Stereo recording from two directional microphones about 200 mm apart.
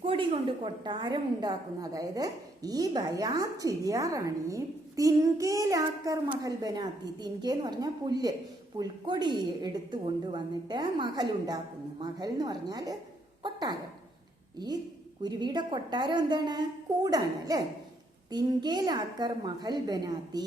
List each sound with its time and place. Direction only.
0.0 s a woman's voice: 25° right (ahead or behind)
15.2 s a woman's voice: 20° right (ahead or behind)